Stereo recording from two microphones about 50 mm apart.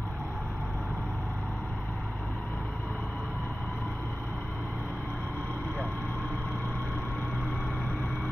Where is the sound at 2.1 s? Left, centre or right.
Left.